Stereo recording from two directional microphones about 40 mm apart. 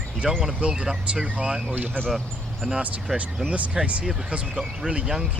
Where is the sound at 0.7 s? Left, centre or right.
Centre.